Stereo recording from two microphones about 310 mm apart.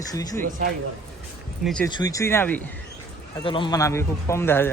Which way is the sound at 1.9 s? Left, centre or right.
Centre.